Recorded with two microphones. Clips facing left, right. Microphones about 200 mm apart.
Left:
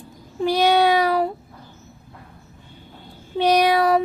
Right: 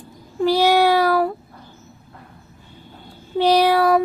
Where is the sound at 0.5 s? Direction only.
10° right (ahead or behind).